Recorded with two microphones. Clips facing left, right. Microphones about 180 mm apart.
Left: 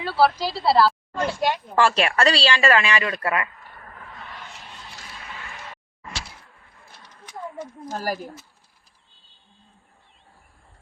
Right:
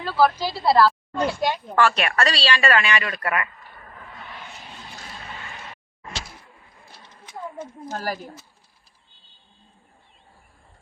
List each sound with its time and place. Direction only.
0.0 s a sound: 5° left (ahead or behind)
0.6 s a woman's voice: 5° left (ahead or behind)
1.2 s speech: 15° right (ahead or behind)
1.7 s a woman's voice: 30° left (ahead or behind)
7.9 s speech: 10° left (ahead or behind)